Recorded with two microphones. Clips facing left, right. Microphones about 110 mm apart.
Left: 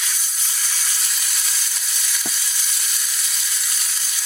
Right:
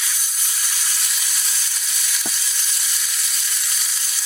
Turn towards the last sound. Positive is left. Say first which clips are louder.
# even
turn(degrees=0)  # may be behind; listen again after turning